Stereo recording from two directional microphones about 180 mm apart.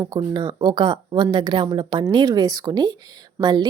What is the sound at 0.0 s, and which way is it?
A woman's voice, 25° right (ahead or behind).